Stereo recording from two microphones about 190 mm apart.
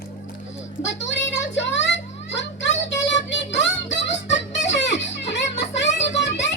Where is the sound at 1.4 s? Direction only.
70° left (ahead or behind).